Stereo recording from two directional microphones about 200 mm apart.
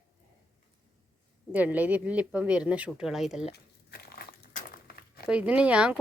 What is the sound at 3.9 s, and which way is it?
Crumpling, 50° left (ahead or behind).